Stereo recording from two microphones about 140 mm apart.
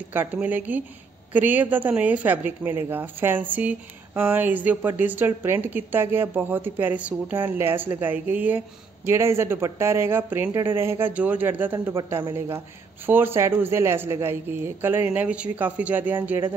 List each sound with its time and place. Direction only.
0.1 s speech: 15° right (ahead or behind)